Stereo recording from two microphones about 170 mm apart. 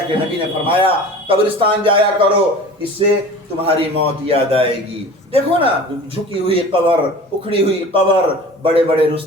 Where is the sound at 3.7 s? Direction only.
35° right (ahead or behind).